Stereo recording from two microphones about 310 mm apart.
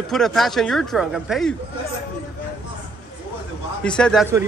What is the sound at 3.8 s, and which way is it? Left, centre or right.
Speech, centre.